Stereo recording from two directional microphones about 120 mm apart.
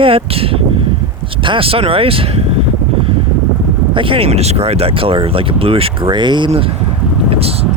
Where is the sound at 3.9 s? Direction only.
45° right (ahead or behind).